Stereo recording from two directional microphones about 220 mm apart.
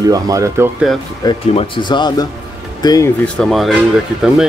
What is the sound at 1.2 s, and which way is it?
Speech, 20° left (ahead or behind).